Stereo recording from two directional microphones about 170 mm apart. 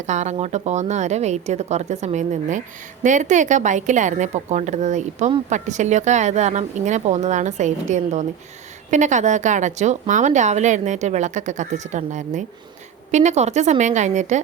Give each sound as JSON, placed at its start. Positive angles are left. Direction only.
{"t": 0.0, "sound": "a woman's voice", "side_deg": -45}